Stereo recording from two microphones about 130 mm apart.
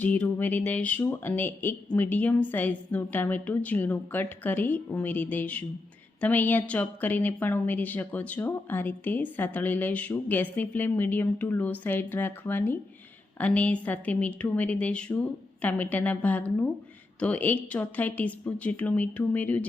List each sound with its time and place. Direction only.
0.0 s a woman's voice: 15° left (ahead or behind)